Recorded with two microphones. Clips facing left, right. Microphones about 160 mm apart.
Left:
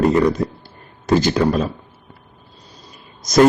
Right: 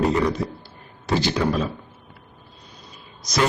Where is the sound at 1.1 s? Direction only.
45° left (ahead or behind).